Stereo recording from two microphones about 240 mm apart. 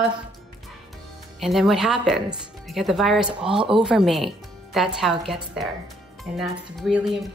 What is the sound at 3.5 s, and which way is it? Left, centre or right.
Speech, right.